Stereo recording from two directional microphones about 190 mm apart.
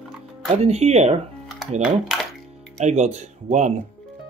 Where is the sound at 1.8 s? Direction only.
Centre (ahead or behind).